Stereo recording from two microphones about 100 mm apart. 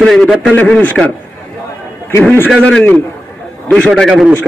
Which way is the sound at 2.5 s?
10° left (ahead or behind).